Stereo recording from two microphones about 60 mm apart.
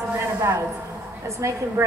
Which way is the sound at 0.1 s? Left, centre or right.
Right.